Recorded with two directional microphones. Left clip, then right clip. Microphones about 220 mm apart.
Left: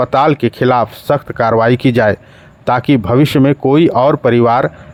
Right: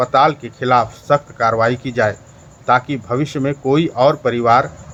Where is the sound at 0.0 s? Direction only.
45° left (ahead or behind).